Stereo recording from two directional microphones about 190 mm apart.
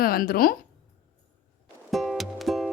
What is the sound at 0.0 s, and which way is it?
Speech, 50° left (ahead or behind).